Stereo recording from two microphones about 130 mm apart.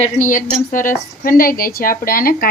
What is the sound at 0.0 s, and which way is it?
Speech, 85° left.